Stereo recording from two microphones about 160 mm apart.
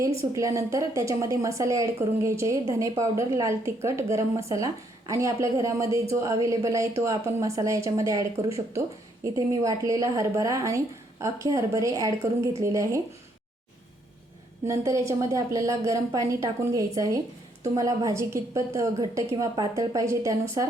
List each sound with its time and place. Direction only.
0.0 s a woman's voice: 20° right (ahead or behind)
14.7 s a woman's voice: 20° right (ahead or behind)